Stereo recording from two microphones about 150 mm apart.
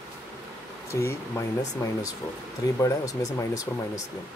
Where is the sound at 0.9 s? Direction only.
20° left (ahead or behind).